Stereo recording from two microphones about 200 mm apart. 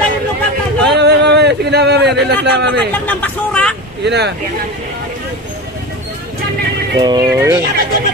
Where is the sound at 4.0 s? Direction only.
60° right (ahead or behind).